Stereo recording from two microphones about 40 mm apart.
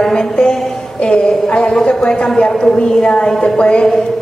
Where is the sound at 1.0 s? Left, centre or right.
Left.